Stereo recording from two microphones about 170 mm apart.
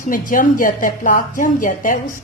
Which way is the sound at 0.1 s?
55° left (ahead or behind).